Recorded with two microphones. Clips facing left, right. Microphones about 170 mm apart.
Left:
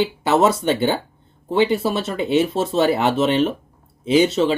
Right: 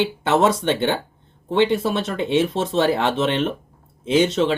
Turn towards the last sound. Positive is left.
turn(degrees=5)  # may be behind; listen again after turning